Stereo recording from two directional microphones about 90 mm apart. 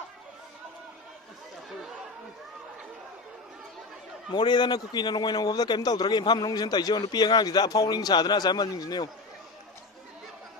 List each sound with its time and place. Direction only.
4.3 s a man's voice: 55° left (ahead or behind)